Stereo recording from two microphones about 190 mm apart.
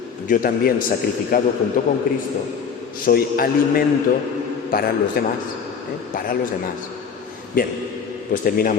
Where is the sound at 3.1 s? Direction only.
50° left (ahead or behind).